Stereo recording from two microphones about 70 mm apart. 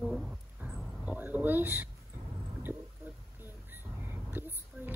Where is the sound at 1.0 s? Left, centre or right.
Right.